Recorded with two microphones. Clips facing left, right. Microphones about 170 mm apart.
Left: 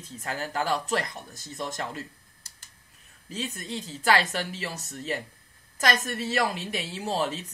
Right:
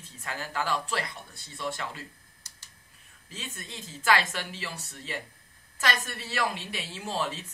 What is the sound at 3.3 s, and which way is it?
A woman's voice, 40° left (ahead or behind).